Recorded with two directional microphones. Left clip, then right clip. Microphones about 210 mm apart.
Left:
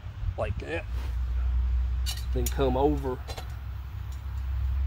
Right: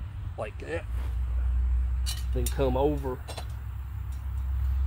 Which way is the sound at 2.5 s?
20° left (ahead or behind).